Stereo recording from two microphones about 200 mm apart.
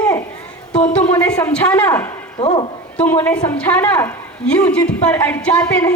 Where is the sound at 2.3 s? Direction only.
25° left (ahead or behind).